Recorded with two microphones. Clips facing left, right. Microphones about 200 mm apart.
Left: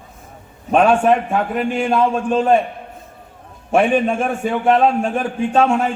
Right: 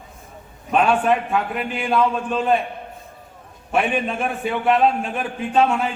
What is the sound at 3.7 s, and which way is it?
A man's voice, 45° left (ahead or behind).